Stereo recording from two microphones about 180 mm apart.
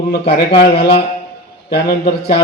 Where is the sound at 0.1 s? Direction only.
65° left (ahead or behind).